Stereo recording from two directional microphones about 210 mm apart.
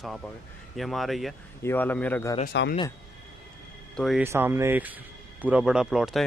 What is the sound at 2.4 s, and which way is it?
Speech, 55° left (ahead or behind).